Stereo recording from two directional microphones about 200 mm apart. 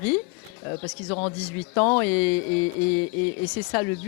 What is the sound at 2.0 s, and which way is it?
Speech, 5° left (ahead or behind).